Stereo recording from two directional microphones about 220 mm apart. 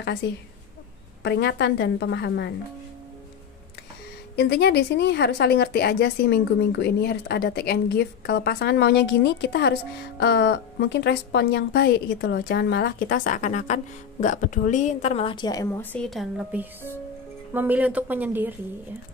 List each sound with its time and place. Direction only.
1.2 s a woman's voice: 50° left (ahead or behind)
4.4 s a woman's voice: 50° left (ahead or behind); by 18.5 s 10° right (ahead or behind)